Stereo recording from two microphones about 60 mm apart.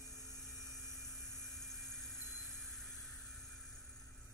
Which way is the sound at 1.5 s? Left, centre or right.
Centre.